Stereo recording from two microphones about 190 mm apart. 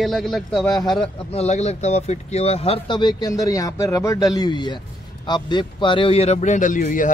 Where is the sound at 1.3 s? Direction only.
35° left (ahead or behind).